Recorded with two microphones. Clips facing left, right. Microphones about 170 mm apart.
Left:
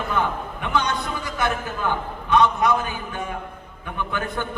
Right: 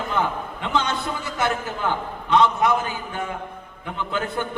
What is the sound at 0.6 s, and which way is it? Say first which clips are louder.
A man's voice: even; 20° right (ahead or behind).